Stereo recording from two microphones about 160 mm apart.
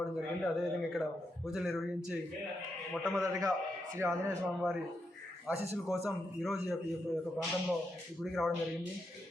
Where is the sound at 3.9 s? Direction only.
20° right (ahead or behind).